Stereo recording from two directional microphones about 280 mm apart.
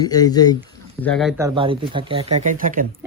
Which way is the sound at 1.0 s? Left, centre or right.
Centre.